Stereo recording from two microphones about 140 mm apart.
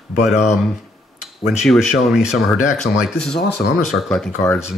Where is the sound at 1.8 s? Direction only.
5° right (ahead or behind).